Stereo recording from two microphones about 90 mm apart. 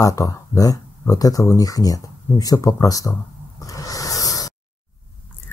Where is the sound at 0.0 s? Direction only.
40° left (ahead or behind).